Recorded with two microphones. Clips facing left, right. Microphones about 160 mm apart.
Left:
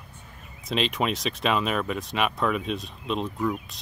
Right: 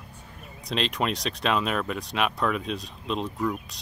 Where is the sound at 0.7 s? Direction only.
Centre (ahead or behind).